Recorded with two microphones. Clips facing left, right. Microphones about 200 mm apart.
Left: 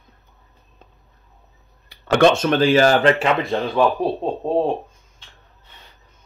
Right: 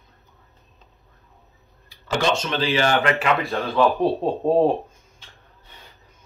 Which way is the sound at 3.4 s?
15° left (ahead or behind).